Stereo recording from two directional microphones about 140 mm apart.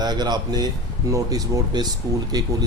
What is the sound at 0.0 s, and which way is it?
Speech, 30° right (ahead or behind).